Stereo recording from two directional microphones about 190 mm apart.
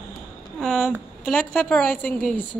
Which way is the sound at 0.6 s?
5° left (ahead or behind).